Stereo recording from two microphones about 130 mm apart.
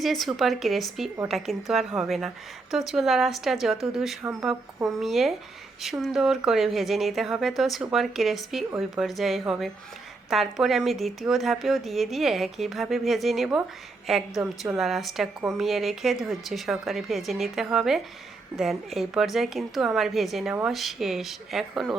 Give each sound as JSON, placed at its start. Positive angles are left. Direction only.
{"t": 0.0, "sound": "speech", "side_deg": 0}